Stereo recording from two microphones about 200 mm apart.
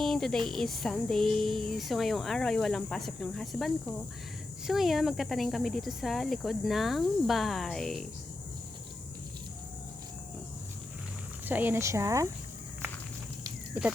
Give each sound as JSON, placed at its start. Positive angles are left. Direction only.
{"t": 0.0, "sound": "a sound", "side_deg": 0}
{"t": 11.4, "sound": "speech", "side_deg": -10}
{"t": 13.7, "sound": "speech", "side_deg": -10}